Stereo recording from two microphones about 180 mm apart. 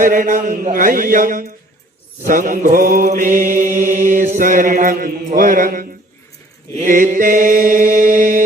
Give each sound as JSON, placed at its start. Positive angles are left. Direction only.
{"t": 0.0, "sound": "mantra", "side_deg": -45}